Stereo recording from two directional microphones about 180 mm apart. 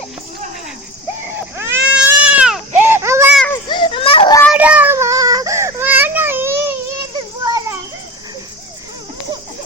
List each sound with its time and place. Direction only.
1.5 s baby cry: 15° right (ahead or behind)
3.3 s children playing: 10° left (ahead or behind)
3.7 s children playing: 25° left (ahead or behind)
4.5 s baby cry: 5° right (ahead or behind)
7.4 s children playing: 20° right (ahead or behind)